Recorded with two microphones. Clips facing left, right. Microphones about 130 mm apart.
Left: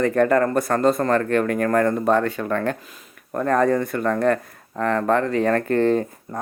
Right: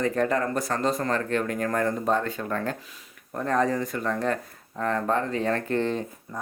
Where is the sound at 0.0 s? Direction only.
60° left (ahead or behind).